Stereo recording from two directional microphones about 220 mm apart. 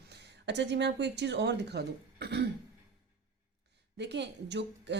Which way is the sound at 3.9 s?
50° right (ahead or behind).